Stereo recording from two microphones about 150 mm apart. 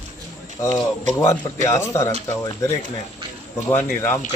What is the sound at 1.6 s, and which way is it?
Speech, 20° left (ahead or behind).